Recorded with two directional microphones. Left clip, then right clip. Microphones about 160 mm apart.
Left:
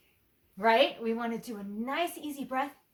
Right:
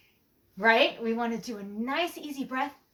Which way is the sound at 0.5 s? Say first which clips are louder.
Right 2 dB; 20° left (ahead or behind).